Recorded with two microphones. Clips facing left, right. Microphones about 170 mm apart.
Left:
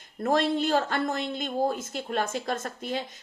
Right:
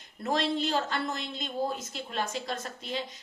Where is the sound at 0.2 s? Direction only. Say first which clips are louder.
Left 4 dB; 50° left (ahead or behind).